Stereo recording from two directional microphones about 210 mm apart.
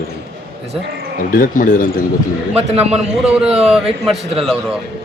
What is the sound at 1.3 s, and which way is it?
Speech, 40° left (ahead or behind).